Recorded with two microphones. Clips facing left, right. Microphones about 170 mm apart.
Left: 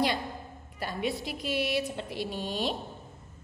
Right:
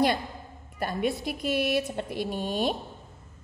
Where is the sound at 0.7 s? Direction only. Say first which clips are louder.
Right 4 dB; 50° right (ahead or behind).